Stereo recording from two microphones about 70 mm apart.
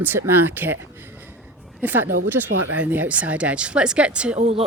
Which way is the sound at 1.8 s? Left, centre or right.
Right.